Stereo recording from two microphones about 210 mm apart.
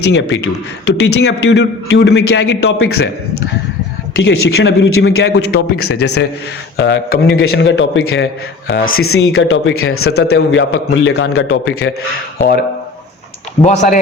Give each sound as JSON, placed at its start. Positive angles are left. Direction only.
{"t": 0.1, "sound": "a man's voice", "side_deg": 55}
{"t": 10.1, "sound": "a man's voice", "side_deg": 50}
{"t": 11.1, "sound": "a man's voice", "side_deg": 90}
{"t": 12.4, "sound": "a man's voice", "side_deg": 50}
{"t": 13.6, "sound": "speech", "side_deg": 35}